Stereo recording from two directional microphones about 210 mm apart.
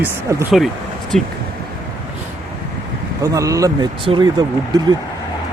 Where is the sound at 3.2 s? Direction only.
15° right (ahead or behind).